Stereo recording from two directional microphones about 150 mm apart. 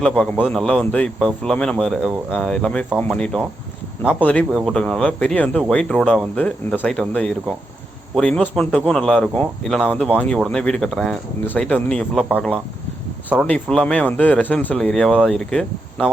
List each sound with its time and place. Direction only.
0.3 s speech: 5° left (ahead or behind)